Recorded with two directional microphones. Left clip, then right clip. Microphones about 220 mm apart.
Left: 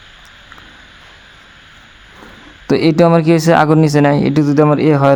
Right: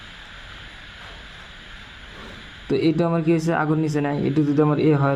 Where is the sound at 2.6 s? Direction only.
45° left (ahead or behind).